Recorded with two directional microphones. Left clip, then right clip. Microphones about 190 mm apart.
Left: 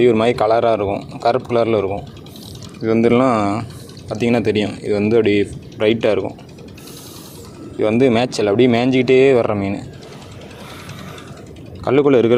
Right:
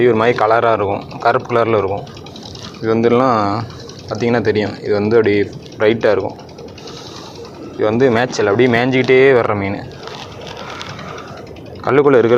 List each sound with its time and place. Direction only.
0.0 s speech: 65° left (ahead or behind)
7.8 s speech: 60° left (ahead or behind)
11.9 s speech: 60° left (ahead or behind)